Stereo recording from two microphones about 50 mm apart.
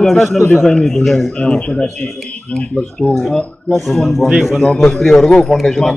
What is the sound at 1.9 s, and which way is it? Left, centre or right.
Speech, centre.